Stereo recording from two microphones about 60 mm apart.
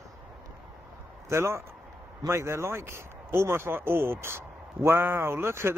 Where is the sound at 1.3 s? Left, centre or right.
Right.